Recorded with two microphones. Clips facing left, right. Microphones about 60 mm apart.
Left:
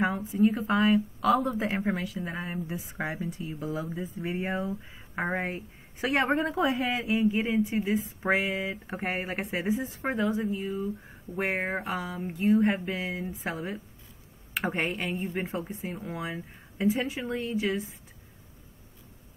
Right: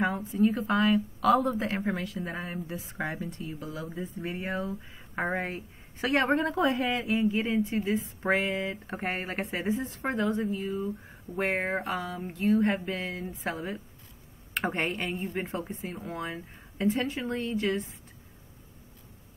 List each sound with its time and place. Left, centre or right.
0.0 s speech: centre
3.5 s speech: left
3.8 s speech: centre
4.3 s speech: centre
4.9 s speech: centre